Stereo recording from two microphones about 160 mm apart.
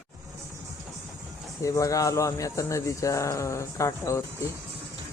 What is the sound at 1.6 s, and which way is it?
Speech, 20° left (ahead or behind).